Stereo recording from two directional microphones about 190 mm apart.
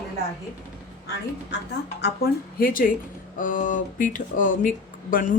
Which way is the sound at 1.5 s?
65° left (ahead or behind).